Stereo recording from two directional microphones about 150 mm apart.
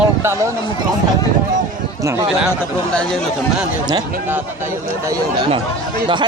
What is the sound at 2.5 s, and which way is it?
Speech, 5° left (ahead or behind).